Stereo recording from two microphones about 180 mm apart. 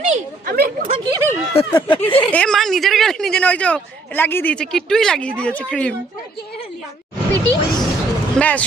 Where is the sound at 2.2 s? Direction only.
5° left (ahead or behind).